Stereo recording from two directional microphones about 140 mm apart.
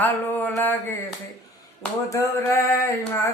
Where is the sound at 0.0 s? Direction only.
15° left (ahead or behind).